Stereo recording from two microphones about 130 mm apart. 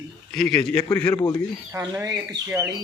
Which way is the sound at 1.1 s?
30° left (ahead or behind).